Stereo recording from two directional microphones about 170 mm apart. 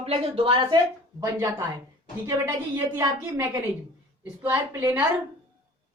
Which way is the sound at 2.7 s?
15° right (ahead or behind).